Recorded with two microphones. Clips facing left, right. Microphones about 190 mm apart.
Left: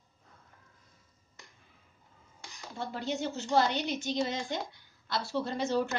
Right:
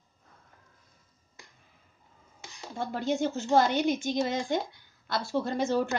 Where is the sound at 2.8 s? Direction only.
50° right (ahead or behind).